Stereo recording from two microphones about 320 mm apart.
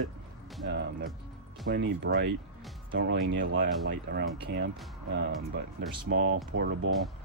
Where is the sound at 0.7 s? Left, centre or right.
Right.